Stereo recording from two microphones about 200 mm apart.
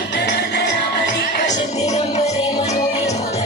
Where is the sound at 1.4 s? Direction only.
20° left (ahead or behind).